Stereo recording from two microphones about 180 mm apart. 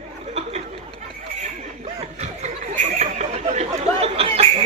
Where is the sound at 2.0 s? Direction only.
35° right (ahead or behind).